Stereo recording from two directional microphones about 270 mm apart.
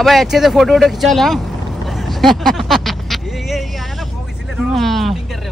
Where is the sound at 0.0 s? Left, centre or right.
Centre.